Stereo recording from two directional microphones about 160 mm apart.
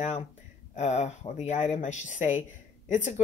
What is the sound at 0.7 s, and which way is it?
Speech, 45° left (ahead or behind).